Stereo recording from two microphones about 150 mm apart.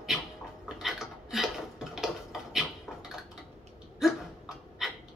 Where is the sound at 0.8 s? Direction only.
Centre (ahead or behind).